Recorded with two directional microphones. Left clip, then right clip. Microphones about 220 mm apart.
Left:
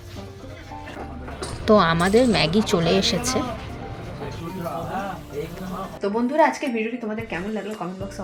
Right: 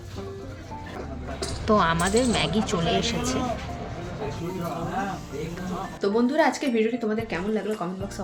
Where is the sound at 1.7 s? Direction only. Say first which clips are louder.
Left 5 dB; 25° left (ahead or behind).